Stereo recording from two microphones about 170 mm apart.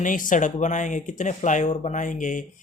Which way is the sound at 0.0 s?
50° left (ahead or behind).